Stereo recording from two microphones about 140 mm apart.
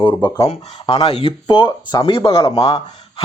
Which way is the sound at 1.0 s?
45° left (ahead or behind).